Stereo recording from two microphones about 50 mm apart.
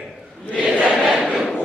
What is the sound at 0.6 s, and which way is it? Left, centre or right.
Crowd, centre.